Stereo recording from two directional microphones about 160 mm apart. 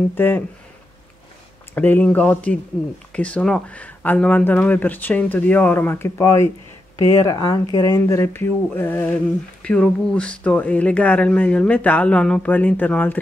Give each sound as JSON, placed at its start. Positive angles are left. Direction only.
{"t": 0.1, "sound": "speech", "side_deg": 15}
{"t": 1.8, "sound": "speech", "side_deg": 10}